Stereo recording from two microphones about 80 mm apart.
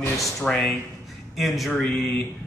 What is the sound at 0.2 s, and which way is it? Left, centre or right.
Speech, centre.